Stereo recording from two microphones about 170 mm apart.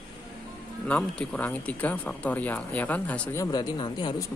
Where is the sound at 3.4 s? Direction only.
25° left (ahead or behind).